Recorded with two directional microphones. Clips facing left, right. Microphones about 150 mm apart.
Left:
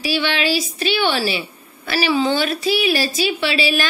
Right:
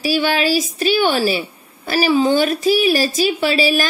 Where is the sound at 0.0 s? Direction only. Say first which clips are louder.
Right 3 dB; 40° right (ahead or behind).